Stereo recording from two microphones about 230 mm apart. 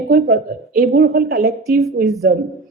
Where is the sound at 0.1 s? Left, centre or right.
Right.